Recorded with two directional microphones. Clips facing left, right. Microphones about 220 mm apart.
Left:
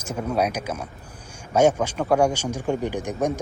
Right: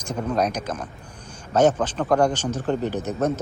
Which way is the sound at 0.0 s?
5° left (ahead or behind).